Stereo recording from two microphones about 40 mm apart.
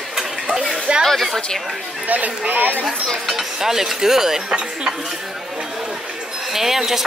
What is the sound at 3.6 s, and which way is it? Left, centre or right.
Speech, centre.